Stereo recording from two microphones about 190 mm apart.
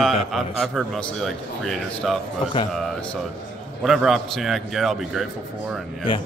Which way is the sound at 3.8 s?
Centre (ahead or behind).